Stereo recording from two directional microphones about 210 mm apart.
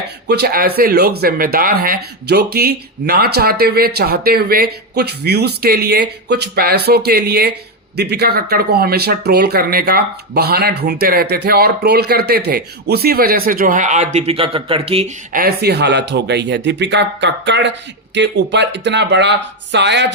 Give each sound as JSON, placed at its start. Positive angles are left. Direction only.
{"t": 0.3, "sound": "speech", "side_deg": -50}
{"t": 15.3, "sound": "speech", "side_deg": -45}